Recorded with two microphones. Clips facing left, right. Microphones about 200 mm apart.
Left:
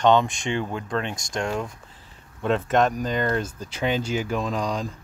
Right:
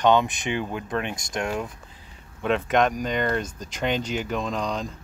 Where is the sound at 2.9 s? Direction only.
5° left (ahead or behind).